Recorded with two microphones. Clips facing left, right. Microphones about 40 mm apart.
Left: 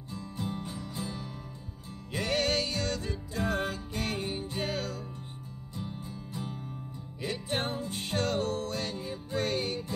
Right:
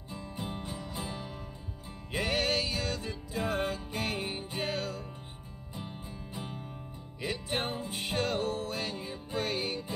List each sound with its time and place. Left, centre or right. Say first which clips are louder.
0.1 s music: left 2 dB; centre
5.8 s music: left 3 dB; centre
7.2 s music: left 1 dB; centre